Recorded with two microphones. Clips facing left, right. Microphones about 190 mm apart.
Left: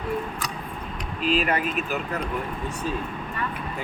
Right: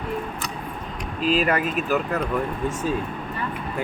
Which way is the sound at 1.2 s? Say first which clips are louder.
Right 2 dB; 40° right (ahead or behind).